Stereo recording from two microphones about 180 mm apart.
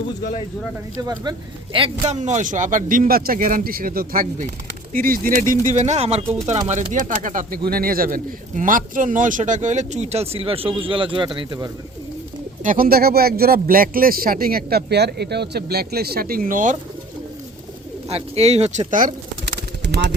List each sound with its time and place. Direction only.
1.0 s speech: 20° right (ahead or behind)
12.6 s speech: 50° right (ahead or behind)
18.1 s speech: 35° right (ahead or behind)
19.5 s bird: 70° right (ahead or behind)